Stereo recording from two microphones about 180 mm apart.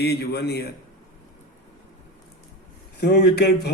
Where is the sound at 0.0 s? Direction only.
65° left (ahead or behind).